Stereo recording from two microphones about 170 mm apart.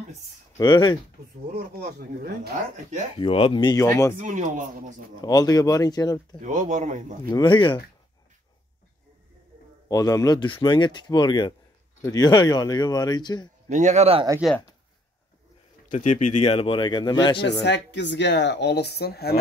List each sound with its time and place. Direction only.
0.6 s speech: 25° left (ahead or behind)
1.5 s speech: 60° right (ahead or behind)
3.2 s speech: 35° left (ahead or behind)
4.1 s speech: 50° right (ahead or behind)
5.2 s speech: 20° left (ahead or behind)
6.4 s speech: 45° right (ahead or behind)
7.2 s speech: 25° left (ahead or behind)
9.8 s speech: 20° left (ahead or behind)
13.7 s speech: 45° right (ahead or behind)
14.4 s speech: 5° right (ahead or behind)
15.9 s speech: 45° left (ahead or behind); by 17.5 s 25° left (ahead or behind)
17.5 s speech: 90° left; by 19.3 s 70° left (ahead or behind)